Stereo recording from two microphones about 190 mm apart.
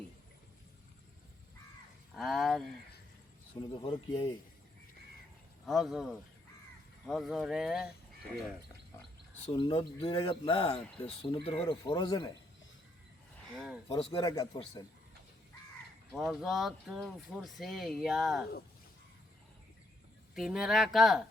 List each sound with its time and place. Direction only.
2.1 s speech: centre (ahead or behind)
3.8 s speech: 25° left (ahead or behind)
5.6 s speech: centre (ahead or behind)
9.6 s speech: 25° left (ahead or behind)
13.5 s speech: centre (ahead or behind)
13.8 s speech: 30° left (ahead or behind)
16.1 s speech: centre (ahead or behind)
20.3 s speech: centre (ahead or behind)